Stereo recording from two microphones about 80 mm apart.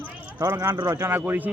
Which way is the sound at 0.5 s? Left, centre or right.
Right.